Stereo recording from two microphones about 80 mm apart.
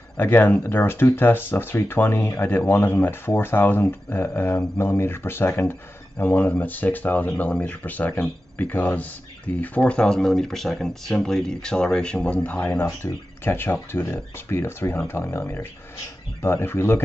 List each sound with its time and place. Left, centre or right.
0.2 s speech: left
13.0 s speech: left